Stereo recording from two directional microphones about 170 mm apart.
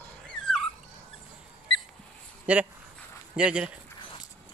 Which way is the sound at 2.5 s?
10° right (ahead or behind).